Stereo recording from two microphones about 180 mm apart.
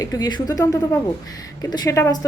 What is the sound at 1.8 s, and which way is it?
Speech, 15° left (ahead or behind).